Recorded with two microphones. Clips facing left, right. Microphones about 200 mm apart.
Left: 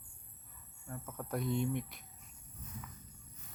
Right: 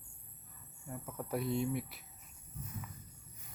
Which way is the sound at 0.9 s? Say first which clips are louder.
Right 1 dB; 10° right (ahead or behind).